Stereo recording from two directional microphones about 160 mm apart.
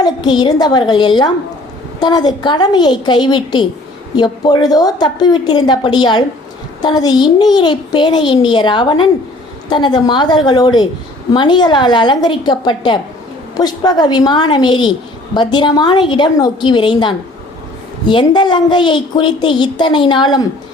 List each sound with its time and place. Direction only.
0.0 s a woman's voice: 25° left (ahead or behind)